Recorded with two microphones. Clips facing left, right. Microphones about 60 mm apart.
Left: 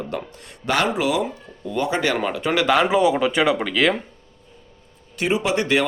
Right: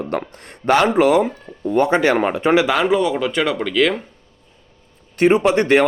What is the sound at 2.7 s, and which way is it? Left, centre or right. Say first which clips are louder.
Speech: even; centre.